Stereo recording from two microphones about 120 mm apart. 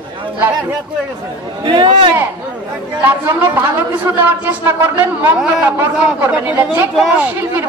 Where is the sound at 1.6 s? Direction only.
45° right (ahead or behind).